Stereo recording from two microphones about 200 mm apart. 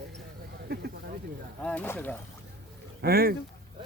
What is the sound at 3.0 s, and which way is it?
Speech, 50° right (ahead or behind).